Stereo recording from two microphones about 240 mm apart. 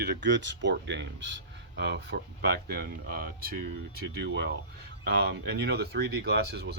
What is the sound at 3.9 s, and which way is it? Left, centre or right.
Speech, right.